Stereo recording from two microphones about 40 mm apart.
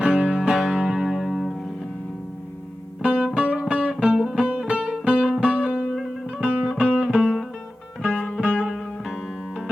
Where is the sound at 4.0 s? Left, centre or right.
Right.